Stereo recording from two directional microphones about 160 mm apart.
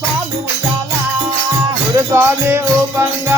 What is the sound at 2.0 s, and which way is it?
Music, 15° right (ahead or behind).